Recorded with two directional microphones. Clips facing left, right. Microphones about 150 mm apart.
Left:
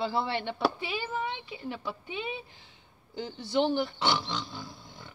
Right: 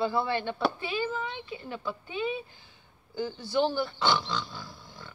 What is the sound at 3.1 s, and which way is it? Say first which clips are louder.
Speech: right 1 dB; 20° left (ahead or behind).